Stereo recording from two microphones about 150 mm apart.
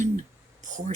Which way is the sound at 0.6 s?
55° right (ahead or behind).